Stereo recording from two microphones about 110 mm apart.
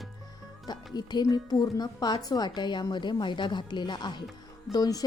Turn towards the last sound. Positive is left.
turn(degrees=35)  # may be behind; listen again after turning